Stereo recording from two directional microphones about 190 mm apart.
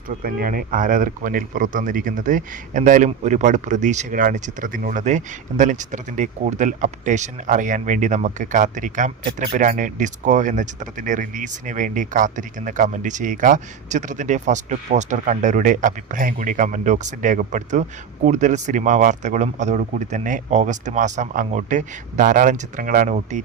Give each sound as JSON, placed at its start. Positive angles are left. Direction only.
{"t": 0.1, "sound": "speech", "side_deg": -45}